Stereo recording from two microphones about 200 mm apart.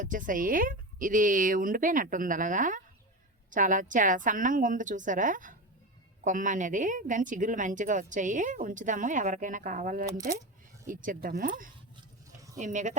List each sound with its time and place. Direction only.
0.0 s a woman's voice: 40° right (ahead or behind)